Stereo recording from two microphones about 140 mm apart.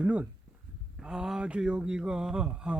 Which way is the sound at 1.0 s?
5° right (ahead or behind).